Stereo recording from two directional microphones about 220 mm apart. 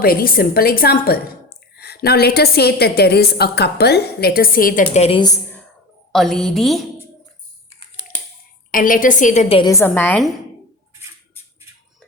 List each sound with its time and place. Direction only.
0.0 s a woman's voice: 45° left (ahead or behind); by 5.6 s 10° left (ahead or behind)
6.1 s a woman's voice: centre (ahead or behind)
8.7 s a woman's voice: 40° left (ahead or behind); by 10.3 s 5° left (ahead or behind)